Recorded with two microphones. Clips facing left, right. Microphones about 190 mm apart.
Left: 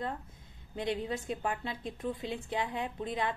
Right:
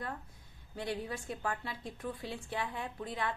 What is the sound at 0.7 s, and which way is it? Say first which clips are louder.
A woman's voice: left 4 dB; 20° left (ahead or behind).